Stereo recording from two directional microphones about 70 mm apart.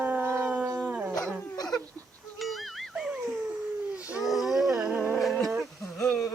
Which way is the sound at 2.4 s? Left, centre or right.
Centre.